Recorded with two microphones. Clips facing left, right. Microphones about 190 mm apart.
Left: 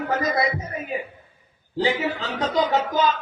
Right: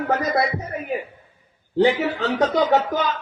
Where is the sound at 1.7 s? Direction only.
65° right (ahead or behind).